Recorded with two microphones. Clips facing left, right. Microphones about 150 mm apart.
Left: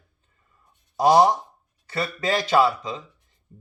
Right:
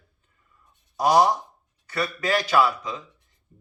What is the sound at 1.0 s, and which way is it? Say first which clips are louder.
A man's voice: left 2 dB; 25° left (ahead or behind).